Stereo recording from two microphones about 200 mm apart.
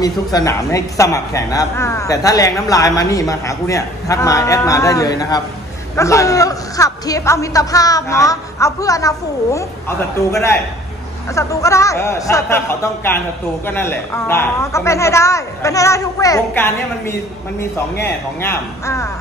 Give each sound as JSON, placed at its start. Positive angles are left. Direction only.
{"t": 0.0, "sound": "a woman's voice", "side_deg": 20}